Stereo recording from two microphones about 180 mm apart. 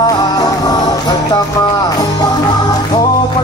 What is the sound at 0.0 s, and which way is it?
Music, 20° left (ahead or behind).